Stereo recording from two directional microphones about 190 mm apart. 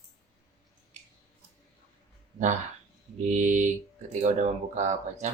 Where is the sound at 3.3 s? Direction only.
40° right (ahead or behind).